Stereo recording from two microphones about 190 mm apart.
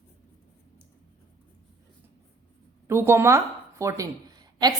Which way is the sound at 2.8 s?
15° right (ahead or behind).